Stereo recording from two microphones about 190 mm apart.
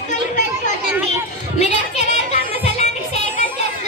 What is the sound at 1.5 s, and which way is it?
Music, 35° left (ahead or behind).